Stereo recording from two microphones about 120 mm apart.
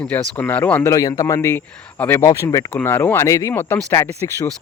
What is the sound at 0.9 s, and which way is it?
Speech, 30° left (ahead or behind).